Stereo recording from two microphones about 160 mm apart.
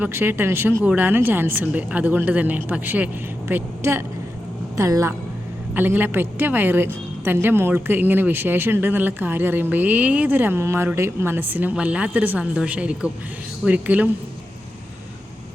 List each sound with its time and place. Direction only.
0.0 s a woman's voice: 15° right (ahead or behind)